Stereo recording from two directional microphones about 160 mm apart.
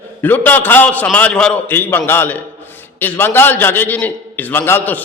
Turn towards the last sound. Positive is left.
turn(degrees=10)  # may be behind; listen again after turning